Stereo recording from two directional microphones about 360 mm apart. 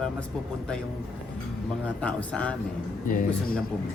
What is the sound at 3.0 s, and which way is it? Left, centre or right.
Speech, left.